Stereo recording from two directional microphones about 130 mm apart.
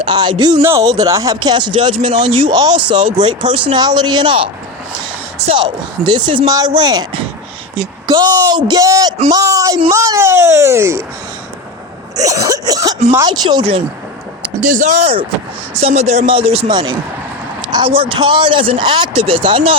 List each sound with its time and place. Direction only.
0.0 s speech: 35° right (ahead or behind)
0.6 s speech: 20° right (ahead or behind); by 4.4 s 40° right (ahead or behind)
6.1 s speech: 35° right (ahead or behind); by 11.0 s 20° right (ahead or behind)
12.1 s speech: 25° right (ahead or behind)
14.6 s speech: 80° right; by 19.7 s 40° right (ahead or behind)